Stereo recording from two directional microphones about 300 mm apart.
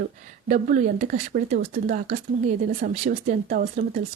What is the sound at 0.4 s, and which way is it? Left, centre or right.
Speech, right.